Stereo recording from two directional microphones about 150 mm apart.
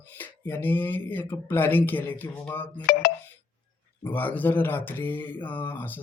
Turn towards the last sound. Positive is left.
turn(degrees=10)  # may be behind; listen again after turning